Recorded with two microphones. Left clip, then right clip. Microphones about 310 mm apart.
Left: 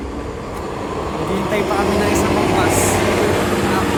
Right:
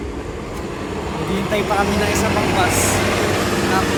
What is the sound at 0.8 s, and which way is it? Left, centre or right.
Vehicle, left.